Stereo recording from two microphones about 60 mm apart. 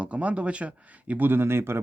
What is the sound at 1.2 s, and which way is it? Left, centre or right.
Speech, right.